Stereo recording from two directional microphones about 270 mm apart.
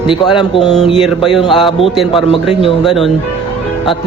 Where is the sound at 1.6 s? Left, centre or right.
Centre.